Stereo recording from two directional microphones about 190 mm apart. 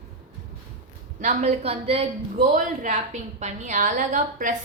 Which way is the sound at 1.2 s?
35° right (ahead or behind).